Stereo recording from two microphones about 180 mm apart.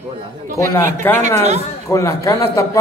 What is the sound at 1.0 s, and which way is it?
Speech, 10° left (ahead or behind).